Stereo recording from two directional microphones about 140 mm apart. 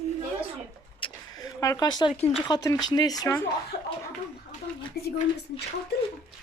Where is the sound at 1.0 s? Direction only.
25° left (ahead or behind).